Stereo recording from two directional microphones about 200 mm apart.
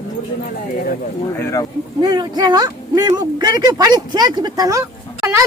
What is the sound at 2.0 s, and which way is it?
Speech, 20° right (ahead or behind).